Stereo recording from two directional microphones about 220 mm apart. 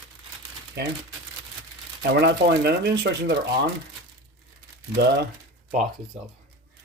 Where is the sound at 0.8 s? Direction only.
50° right (ahead or behind).